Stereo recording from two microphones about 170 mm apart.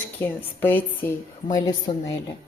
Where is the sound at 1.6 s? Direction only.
25° left (ahead or behind).